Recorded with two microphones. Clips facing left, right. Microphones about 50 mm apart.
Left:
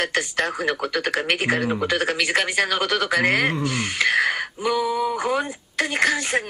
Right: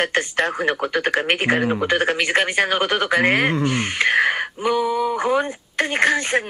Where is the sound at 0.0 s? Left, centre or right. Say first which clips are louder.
Right 3 dB; right.